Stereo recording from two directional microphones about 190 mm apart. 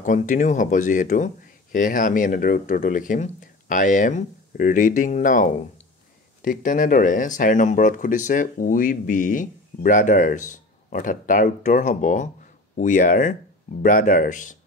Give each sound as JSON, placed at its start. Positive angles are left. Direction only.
{"t": 0.0, "sound": "speech", "side_deg": 40}